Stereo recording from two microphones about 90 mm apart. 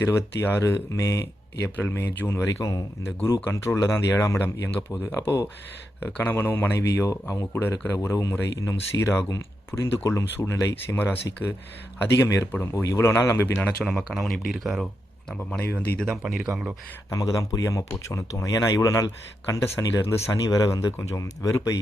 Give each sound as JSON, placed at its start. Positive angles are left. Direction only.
{"t": 0.0, "sound": "speech", "side_deg": 25}
{"t": 1.6, "sound": "speech", "side_deg": 25}
{"t": 2.5, "sound": "speech", "side_deg": 40}
{"t": 12.7, "sound": "speech", "side_deg": 35}
{"t": 13.8, "sound": "speech", "side_deg": 0}
{"t": 15.3, "sound": "speech", "side_deg": 5}
{"t": 16.0, "sound": "speech", "side_deg": -5}
{"t": 17.1, "sound": "speech", "side_deg": 35}